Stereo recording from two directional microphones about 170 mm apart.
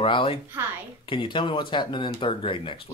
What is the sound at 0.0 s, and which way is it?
Speech, 30° left (ahead or behind).